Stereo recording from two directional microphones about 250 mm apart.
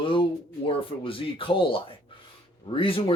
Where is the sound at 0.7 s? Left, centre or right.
Left.